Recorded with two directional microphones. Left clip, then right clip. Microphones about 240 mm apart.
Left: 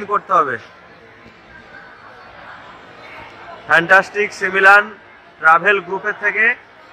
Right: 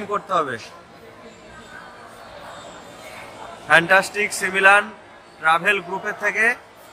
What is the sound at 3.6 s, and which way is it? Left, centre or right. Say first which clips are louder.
A man's voice: left 3 dB; centre.